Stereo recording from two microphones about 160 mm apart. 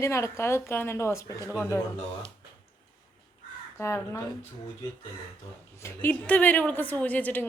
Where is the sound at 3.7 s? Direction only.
15° left (ahead or behind).